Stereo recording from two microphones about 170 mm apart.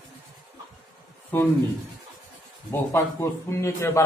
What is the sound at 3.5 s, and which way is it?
Speech, 15° left (ahead or behind).